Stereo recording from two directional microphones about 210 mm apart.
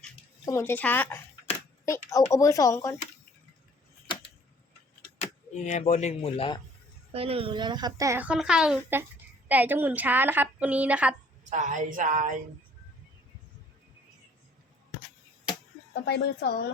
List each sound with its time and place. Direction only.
0.4 s a child's voice: 10° left (ahead or behind)
5.2 s speech: 35° left (ahead or behind)
7.1 s a child's voice: 25° right (ahead or behind); by 11.1 s 5° right (ahead or behind)
11.5 s speech: 40° right (ahead or behind)
16.0 s a woman's voice: 50° left (ahead or behind)